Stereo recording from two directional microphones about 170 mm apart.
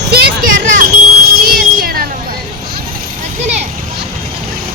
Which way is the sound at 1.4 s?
60° right (ahead or behind).